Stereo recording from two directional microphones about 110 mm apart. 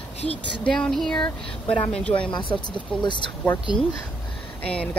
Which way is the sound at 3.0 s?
45° left (ahead or behind).